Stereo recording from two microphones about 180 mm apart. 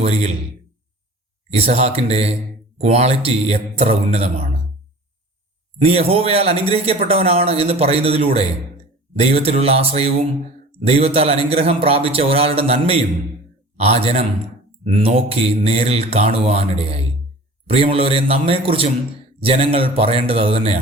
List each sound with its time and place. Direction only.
0.0 s speech: 35° right (ahead or behind)
1.5 s speech: 35° right (ahead or behind)
5.8 s speech: 35° right (ahead or behind)